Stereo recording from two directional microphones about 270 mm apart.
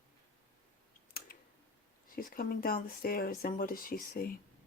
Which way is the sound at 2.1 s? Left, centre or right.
Left.